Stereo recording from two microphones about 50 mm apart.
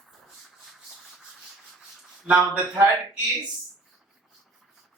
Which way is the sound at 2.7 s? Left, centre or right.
Right.